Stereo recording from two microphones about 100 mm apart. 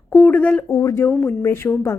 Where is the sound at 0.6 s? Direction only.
30° left (ahead or behind).